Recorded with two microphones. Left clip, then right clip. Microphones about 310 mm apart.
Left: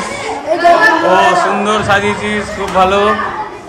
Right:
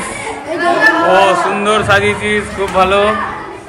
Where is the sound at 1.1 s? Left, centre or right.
Centre.